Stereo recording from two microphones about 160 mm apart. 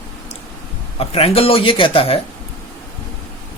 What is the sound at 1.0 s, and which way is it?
Speech, 35° left (ahead or behind).